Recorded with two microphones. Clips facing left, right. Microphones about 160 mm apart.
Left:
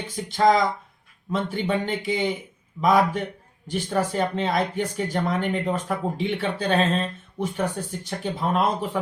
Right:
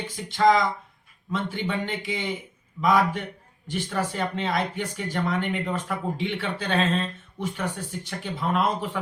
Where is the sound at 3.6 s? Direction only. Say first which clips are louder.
Left 3 dB; 40° left (ahead or behind).